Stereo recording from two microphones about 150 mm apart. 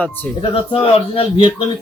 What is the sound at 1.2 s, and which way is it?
Speech, 35° left (ahead or behind).